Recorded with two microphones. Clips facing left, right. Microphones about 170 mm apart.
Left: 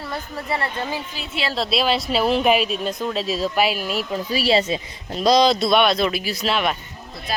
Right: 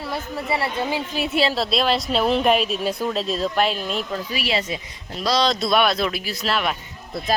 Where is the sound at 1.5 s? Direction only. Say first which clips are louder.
Even; centre (ahead or behind).